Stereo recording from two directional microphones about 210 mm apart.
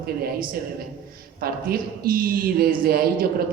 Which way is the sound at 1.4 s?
45° right (ahead or behind).